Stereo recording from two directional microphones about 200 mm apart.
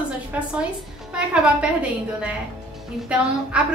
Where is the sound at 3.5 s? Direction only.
5° right (ahead or behind).